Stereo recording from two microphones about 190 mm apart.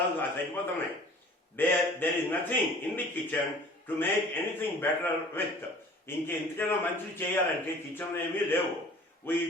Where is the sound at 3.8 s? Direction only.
10° left (ahead or behind).